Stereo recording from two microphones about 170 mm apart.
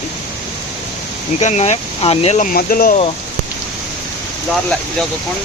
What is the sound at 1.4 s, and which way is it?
Speech, 40° left (ahead or behind).